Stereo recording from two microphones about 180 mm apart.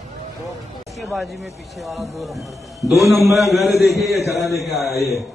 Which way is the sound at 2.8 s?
15° left (ahead or behind).